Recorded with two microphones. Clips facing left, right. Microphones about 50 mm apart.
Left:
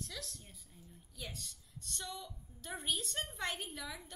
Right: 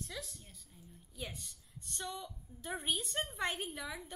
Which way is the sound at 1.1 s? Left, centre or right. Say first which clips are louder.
Right 2 dB; centre.